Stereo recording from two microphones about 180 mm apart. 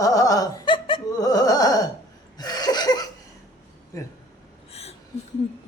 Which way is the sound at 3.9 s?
20° left (ahead or behind).